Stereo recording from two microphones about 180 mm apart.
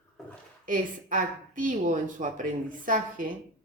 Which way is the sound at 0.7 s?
45° right (ahead or behind).